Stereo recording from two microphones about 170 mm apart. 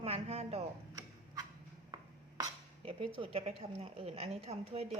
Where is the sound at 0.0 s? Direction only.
35° right (ahead or behind).